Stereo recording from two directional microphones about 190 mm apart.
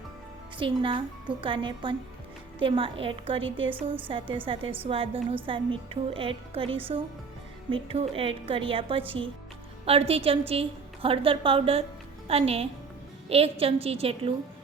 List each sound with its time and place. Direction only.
0.6 s a woman's voice: 25° right (ahead or behind)